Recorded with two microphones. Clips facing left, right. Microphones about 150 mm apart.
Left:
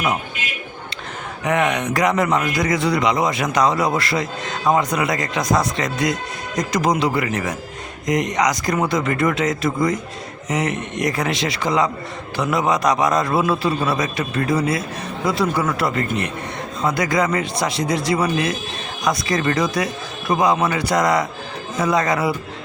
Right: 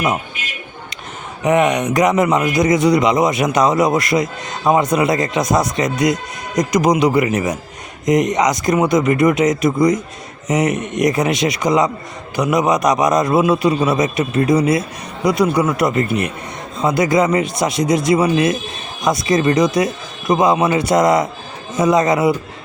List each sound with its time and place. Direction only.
1.5 s speech: 20° right (ahead or behind)